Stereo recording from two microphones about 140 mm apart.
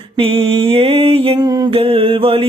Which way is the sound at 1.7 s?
40° right (ahead or behind).